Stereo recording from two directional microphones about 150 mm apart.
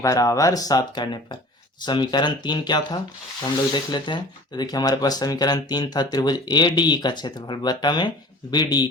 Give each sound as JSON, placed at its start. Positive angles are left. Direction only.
{"t": 0.0, "sound": "speech", "side_deg": 20}